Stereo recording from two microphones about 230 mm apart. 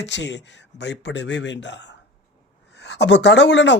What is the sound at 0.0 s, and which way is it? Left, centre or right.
Speech, left.